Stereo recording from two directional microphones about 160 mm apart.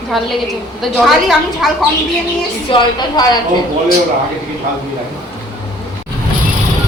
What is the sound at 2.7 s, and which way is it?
Speech, 35° left (ahead or behind).